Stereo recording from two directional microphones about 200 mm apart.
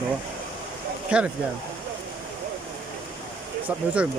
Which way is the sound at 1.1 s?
5° right (ahead or behind).